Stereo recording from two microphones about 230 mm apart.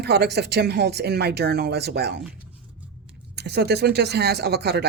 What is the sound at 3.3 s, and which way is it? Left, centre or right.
Speech, right.